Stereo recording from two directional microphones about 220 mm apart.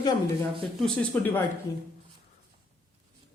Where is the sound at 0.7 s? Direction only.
5° left (ahead or behind).